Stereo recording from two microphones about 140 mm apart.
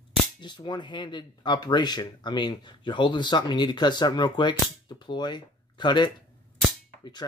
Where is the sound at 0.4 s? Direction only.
30° left (ahead or behind).